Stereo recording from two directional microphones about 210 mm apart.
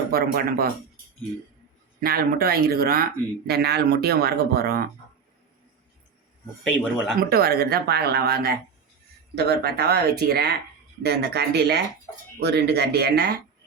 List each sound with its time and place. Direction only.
0.1 s speech: 45° right (ahead or behind)
2.0 s speech: 45° right (ahead or behind)
7.2 s speech: 45° right (ahead or behind)